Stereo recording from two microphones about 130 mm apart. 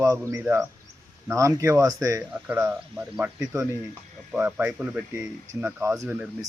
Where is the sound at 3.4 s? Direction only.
25° right (ahead or behind).